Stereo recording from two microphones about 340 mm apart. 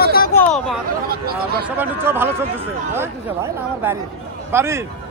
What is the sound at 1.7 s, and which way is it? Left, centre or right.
Speech, centre.